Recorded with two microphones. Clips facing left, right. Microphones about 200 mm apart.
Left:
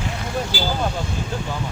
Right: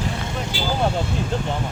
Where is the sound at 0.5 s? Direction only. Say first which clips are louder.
Even; 25° right (ahead or behind).